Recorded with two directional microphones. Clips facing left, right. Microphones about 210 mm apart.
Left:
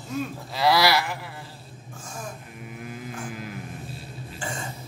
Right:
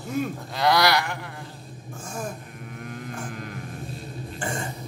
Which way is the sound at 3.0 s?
5° left (ahead or behind).